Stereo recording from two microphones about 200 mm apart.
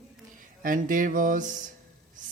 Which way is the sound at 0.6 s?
45° right (ahead or behind).